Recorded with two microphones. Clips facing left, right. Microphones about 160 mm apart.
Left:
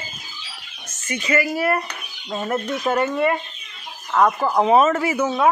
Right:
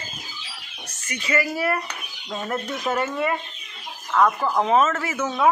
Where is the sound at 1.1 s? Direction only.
30° left (ahead or behind).